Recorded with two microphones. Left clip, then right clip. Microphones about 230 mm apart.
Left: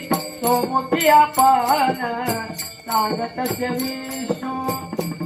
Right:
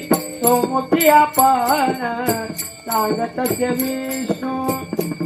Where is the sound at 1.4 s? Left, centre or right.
Left.